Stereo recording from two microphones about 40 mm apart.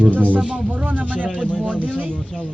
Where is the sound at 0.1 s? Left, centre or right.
Right.